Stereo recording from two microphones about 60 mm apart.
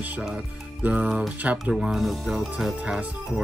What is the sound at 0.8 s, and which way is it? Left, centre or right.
Music, right.